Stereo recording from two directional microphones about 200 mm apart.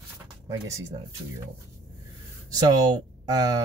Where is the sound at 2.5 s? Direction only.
20° right (ahead or behind).